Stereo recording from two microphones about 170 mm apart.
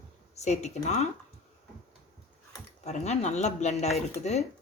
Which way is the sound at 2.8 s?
40° left (ahead or behind).